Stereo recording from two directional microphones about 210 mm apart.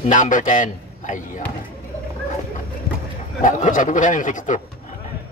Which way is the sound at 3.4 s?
40° left (ahead or behind).